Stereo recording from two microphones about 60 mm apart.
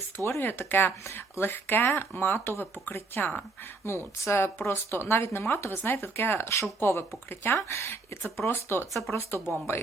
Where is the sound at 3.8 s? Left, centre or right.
Left.